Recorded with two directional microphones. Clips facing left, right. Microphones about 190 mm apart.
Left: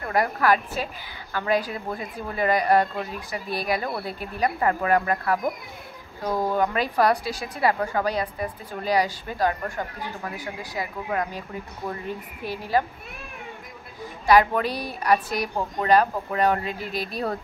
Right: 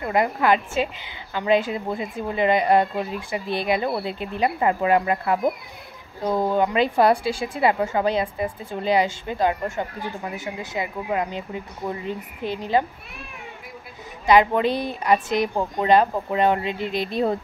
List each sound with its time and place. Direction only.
0.0 s a woman's voice: 20° right (ahead or behind)
12.4 s a woman's voice: 20° right (ahead or behind)
14.2 s a woman's voice: 20° right (ahead or behind)
16.8 s speech: 5° left (ahead or behind)
17.1 s a woman's voice: 25° right (ahead or behind)